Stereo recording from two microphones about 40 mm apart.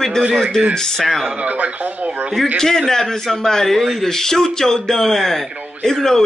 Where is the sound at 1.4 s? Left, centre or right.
Right.